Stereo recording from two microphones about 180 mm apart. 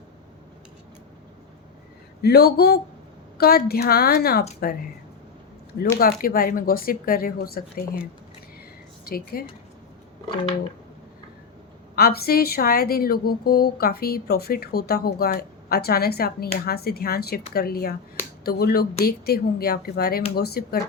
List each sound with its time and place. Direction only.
2.2 s speech: 65° left (ahead or behind)
5.8 s speech: 55° left (ahead or behind)
9.0 s speech: 55° left (ahead or behind)
11.9 s speech: 60° left (ahead or behind)